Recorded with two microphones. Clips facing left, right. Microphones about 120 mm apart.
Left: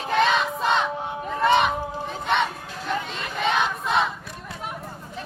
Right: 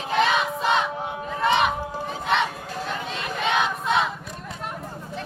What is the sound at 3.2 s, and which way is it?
Battle cry, centre (ahead or behind).